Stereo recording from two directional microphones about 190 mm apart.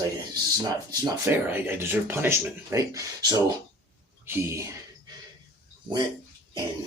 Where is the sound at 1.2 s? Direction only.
10° right (ahead or behind).